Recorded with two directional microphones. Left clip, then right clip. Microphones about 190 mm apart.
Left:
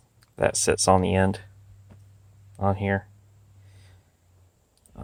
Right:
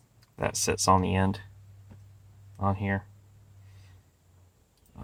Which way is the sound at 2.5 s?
35° left (ahead or behind).